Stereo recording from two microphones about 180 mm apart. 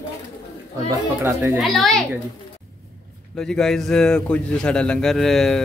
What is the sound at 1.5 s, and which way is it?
Speech, centre (ahead or behind).